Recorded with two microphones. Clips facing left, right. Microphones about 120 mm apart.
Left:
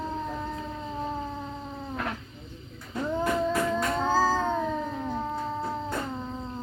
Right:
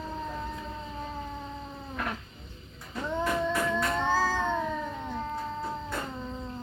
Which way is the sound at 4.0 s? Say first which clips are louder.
Left 5 dB; 40° left (ahead or behind).